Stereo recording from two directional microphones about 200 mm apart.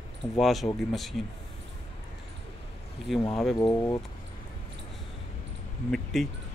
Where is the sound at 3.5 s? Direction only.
15° left (ahead or behind).